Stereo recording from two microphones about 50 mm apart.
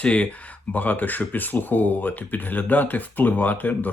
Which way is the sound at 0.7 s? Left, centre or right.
Left.